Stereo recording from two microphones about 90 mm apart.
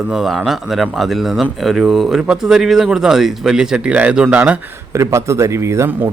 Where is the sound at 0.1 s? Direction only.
Centre (ahead or behind); by 4.6 s 20° right (ahead or behind).